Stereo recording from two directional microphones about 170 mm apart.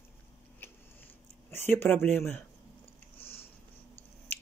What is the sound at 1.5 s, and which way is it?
Speech, 15° left (ahead or behind).